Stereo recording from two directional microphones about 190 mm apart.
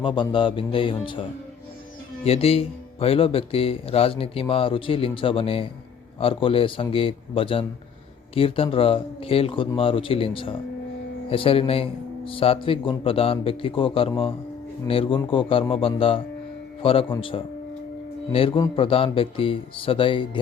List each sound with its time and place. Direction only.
0.0 s speech: 25° left (ahead or behind)
2.2 s speech: 30° left (ahead or behind)